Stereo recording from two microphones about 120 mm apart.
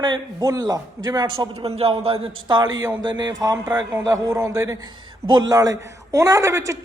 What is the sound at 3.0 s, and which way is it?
A woman's voice, 35° right (ahead or behind).